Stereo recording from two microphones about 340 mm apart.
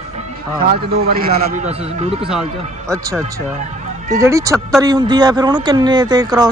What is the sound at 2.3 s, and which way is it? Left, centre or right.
Speech, centre.